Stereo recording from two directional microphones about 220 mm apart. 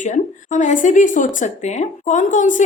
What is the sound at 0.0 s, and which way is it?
A woman's voice, 35° left (ahead or behind).